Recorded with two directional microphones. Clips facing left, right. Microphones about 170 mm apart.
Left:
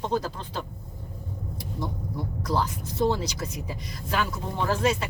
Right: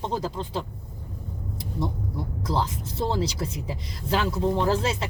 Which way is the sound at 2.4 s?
25° right (ahead or behind).